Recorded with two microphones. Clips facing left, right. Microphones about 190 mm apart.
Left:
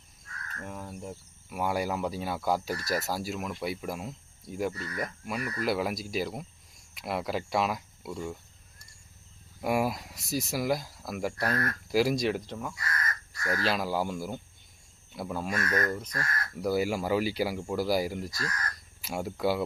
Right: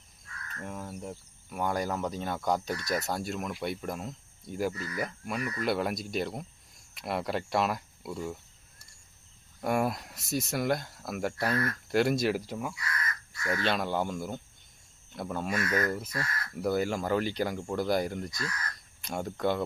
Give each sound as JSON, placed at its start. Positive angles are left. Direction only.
{"t": 0.6, "sound": "speech", "side_deg": 0}
{"t": 4.7, "sound": "speech", "side_deg": 35}
{"t": 4.9, "sound": "speech", "side_deg": 0}
{"t": 9.6, "sound": "speech", "side_deg": 5}
{"t": 11.5, "sound": "speech", "side_deg": 45}
{"t": 11.9, "sound": "speech", "side_deg": 0}
{"t": 13.4, "sound": "speech", "side_deg": 35}
{"t": 13.7, "sound": "speech", "side_deg": 5}